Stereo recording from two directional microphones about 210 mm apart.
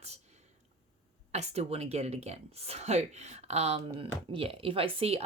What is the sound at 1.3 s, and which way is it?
Speech, 30° right (ahead or behind).